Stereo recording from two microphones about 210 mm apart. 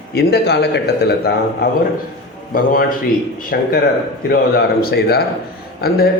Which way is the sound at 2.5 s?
45° left (ahead or behind).